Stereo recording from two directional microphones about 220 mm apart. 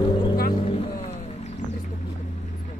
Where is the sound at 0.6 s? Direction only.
25° left (ahead or behind).